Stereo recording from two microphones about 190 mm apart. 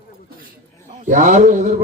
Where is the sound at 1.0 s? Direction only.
40° right (ahead or behind).